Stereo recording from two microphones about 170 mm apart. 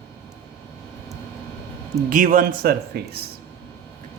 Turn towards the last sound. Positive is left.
turn(degrees=-65)  # may be behind; listen again after turning